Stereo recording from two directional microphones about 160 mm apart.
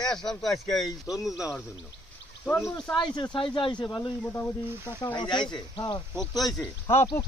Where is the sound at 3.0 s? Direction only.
30° left (ahead or behind).